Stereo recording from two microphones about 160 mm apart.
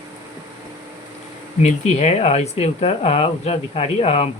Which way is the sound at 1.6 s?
45° left (ahead or behind).